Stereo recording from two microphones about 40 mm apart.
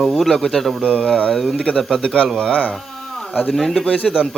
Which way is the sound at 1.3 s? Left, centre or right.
Centre.